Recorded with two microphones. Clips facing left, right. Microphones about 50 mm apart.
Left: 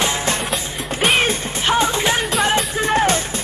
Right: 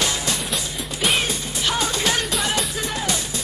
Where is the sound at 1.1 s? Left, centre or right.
Left.